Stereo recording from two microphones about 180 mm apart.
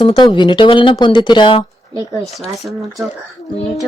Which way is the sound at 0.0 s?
25° left (ahead or behind).